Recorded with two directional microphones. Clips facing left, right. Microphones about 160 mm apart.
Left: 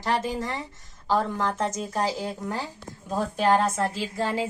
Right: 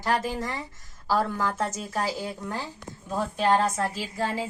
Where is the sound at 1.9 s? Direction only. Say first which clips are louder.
Left 1 dB; 20° left (ahead or behind).